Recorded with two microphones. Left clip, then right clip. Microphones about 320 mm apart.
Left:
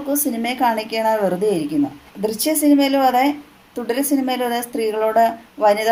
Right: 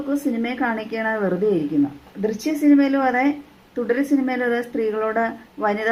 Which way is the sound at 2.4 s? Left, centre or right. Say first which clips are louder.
Left 1 dB; left.